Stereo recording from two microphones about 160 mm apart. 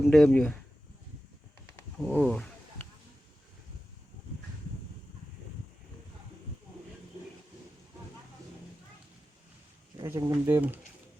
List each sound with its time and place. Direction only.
0.0 s roaring cats: centre (ahead or behind)
2.0 s roaring cats: centre (ahead or behind)
10.0 s speech: 20° right (ahead or behind)